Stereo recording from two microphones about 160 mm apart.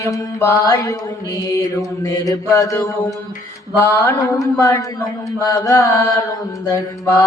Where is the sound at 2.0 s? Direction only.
20° left (ahead or behind).